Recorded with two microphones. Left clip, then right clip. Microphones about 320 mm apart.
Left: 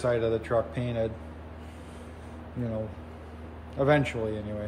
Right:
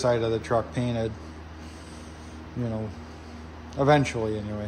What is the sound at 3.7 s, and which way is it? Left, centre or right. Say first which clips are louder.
Speech: right 3 dB; centre.